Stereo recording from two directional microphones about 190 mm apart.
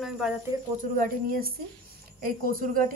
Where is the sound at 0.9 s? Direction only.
50° right (ahead or behind).